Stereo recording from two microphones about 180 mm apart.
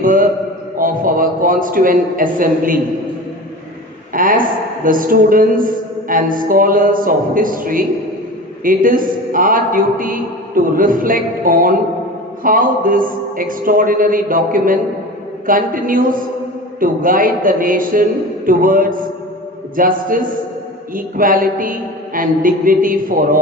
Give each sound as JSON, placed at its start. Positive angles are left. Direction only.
{"t": 0.0, "sound": "a man's voice", "side_deg": -50}
{"t": 4.1, "sound": "a woman's voice", "side_deg": -50}